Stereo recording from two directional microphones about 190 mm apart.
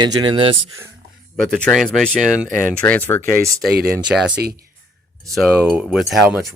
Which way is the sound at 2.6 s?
10° left (ahead or behind).